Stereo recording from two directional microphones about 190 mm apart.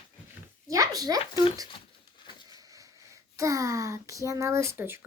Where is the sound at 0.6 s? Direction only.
15° right (ahead or behind).